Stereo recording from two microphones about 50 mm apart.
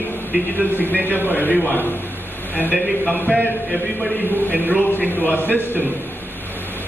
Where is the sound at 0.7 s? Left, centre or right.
Left.